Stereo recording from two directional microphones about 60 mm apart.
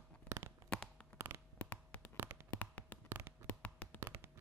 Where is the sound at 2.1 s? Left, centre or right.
Right.